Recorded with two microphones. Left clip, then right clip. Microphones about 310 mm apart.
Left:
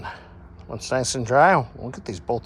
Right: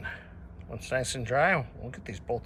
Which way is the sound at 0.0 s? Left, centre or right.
Centre.